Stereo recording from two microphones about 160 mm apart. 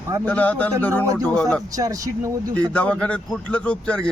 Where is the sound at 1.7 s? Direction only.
20° right (ahead or behind).